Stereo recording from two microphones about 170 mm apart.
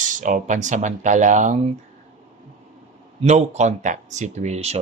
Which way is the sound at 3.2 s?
40° right (ahead or behind).